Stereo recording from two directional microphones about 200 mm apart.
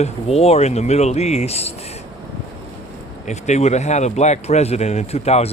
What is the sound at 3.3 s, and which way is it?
Speech, 35° left (ahead or behind).